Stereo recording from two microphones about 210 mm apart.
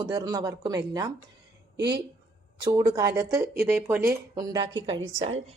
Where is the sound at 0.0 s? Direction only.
20° right (ahead or behind).